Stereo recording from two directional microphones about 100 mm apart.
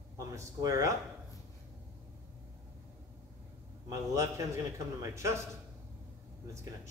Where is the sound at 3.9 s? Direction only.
30° right (ahead or behind).